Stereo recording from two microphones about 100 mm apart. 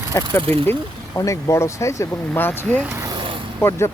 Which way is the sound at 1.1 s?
30° left (ahead or behind).